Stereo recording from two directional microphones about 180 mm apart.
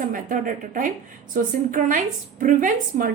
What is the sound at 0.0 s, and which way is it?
A woman's voice, 45° right (ahead or behind).